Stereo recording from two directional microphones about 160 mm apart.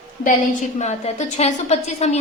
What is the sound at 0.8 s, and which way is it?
A woman's voice, 45° left (ahead or behind).